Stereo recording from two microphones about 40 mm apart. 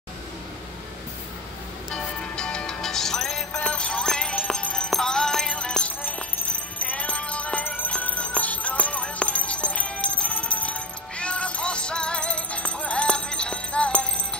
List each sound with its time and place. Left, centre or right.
1.9 s music: centre
3.5 s music: left
5.9 s jingle bell: left
6.8 s music: left
7.6 s music: left
8.2 s music: left